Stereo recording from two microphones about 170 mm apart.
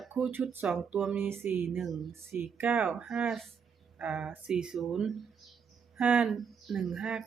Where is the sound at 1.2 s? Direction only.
15° right (ahead or behind).